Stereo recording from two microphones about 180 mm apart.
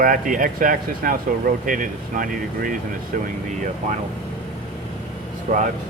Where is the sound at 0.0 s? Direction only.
50° right (ahead or behind).